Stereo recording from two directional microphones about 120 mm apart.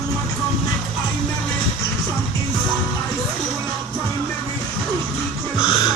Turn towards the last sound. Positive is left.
turn(degrees=40)  # may be behind; listen again after turning